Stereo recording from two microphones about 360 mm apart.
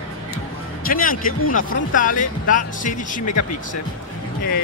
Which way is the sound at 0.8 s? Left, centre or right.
Left.